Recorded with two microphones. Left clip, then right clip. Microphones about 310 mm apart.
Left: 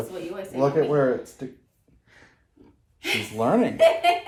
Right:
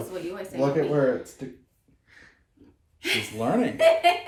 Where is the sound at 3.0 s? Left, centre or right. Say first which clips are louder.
Left 1 dB; centre.